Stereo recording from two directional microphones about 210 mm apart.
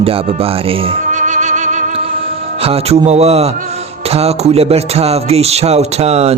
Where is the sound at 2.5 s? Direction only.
30° right (ahead or behind).